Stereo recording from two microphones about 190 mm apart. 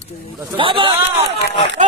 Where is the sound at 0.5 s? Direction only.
25° right (ahead or behind).